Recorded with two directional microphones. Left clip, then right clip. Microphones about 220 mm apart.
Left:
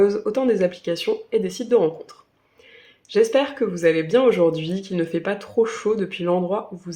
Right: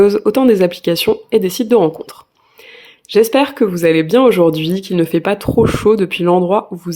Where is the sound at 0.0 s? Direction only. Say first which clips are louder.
Right 8 dB; 45° right (ahead or behind).